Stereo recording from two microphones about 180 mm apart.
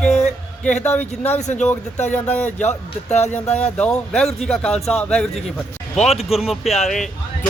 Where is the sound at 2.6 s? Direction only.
40° left (ahead or behind).